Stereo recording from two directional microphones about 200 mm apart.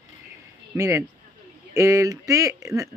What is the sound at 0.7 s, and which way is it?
Speech, 15° right (ahead or behind).